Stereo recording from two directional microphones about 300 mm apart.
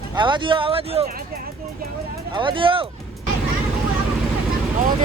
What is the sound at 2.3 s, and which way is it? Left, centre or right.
Speech, centre.